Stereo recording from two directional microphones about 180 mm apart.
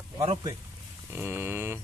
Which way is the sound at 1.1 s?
10° right (ahead or behind).